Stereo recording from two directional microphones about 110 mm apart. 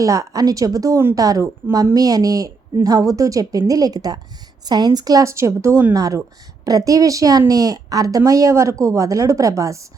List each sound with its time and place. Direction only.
0.0 s a woman's voice: 30° right (ahead or behind)